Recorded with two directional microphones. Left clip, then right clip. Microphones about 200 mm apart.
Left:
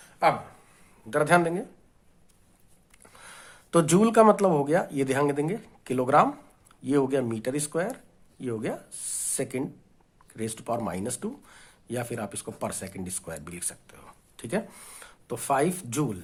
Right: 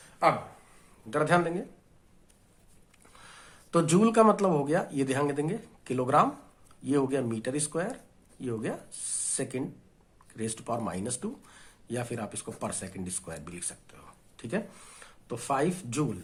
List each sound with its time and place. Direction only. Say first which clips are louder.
0.0 s a sound: left 2 dB; 30° left (ahead or behind)
1.1 s speech: left 4 dB; 30° left (ahead or behind)
3.0 s speech: left 4 dB; 30° left (ahead or behind)